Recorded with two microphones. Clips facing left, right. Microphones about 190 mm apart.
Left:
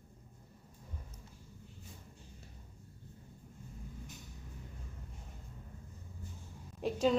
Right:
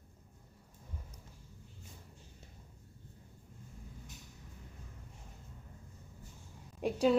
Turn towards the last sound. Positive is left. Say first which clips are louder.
# right 2 dB
turn(degrees=-10)  # may be behind; listen again after turning